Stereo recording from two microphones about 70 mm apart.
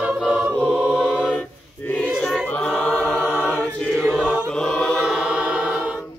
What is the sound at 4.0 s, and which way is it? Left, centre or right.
Chant, centre.